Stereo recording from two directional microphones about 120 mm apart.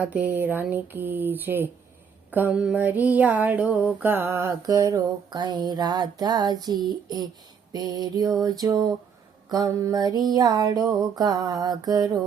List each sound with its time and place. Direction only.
0.0 s speech: 15° right (ahead or behind)
2.3 s mantra: 10° right (ahead or behind); by 12.0 s 35° right (ahead or behind)